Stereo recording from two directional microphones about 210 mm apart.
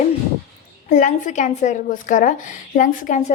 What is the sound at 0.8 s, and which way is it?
A woman's voice, 35° left (ahead or behind).